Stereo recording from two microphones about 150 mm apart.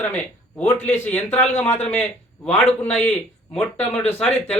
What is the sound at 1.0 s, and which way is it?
A man's voice, 10° left (ahead or behind).